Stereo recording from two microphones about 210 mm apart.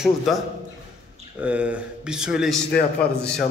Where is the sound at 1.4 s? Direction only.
5° right (ahead or behind).